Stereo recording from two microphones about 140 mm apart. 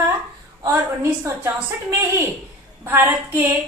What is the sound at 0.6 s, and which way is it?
Speech, 20° right (ahead or behind).